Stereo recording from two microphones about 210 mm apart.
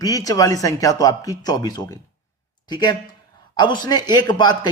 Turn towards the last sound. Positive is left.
turn(degrees=20)  # may be behind; listen again after turning